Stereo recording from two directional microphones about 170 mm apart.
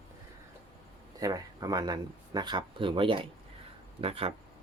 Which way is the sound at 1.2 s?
20° right (ahead or behind).